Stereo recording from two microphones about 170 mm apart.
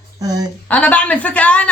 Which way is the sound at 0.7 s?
10° left (ahead or behind).